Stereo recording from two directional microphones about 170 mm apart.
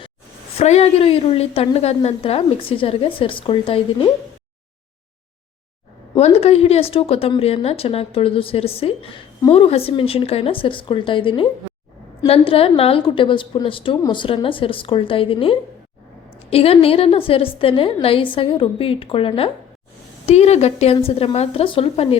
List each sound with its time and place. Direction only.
0.5 s a woman's voice: 40° left (ahead or behind)
6.1 s a woman's voice: 35° left (ahead or behind)